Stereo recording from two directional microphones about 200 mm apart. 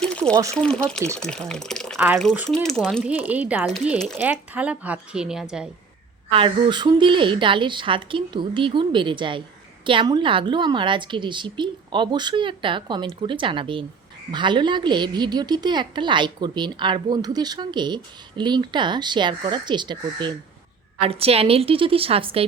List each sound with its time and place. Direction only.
0.0 s a sound: 5° left (ahead or behind)
0.5 s speech: 5° left (ahead or behind)
2.0 s speech: 10° right (ahead or behind)
2.6 s speech: 5° left (ahead or behind)
3.1 s speech: 10° right (ahead or behind)
3.7 s speech: centre (ahead or behind)
4.2 s speech: 10° right (ahead or behind)
6.3 s a woman's voice: 25° right (ahead or behind)